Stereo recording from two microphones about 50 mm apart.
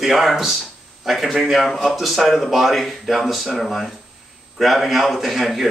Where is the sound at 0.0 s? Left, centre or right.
Centre.